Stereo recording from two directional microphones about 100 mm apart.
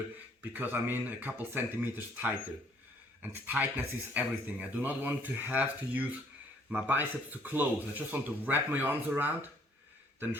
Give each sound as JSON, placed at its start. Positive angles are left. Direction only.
{"t": 0.5, "sound": "speech", "side_deg": -20}